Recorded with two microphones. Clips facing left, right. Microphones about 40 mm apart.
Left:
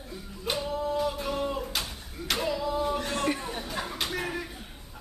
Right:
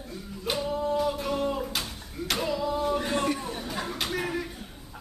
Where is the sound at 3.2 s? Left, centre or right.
Centre.